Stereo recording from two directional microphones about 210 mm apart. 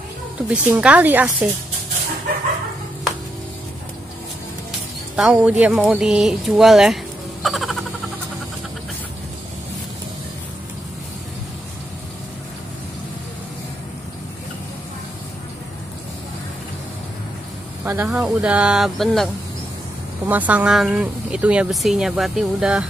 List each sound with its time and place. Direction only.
0.5 s speech: 5° right (ahead or behind)
5.1 s speech: 5° right (ahead or behind)
7.4 s a sound: centre (ahead or behind)
17.8 s speech: 5° right (ahead or behind)